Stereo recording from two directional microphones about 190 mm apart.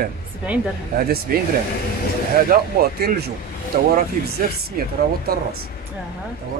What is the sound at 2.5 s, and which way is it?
Speech, 55° right (ahead or behind).